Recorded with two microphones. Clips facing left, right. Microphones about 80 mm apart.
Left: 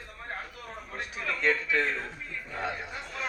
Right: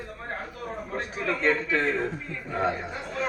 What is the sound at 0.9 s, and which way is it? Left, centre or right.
A man's voice, right.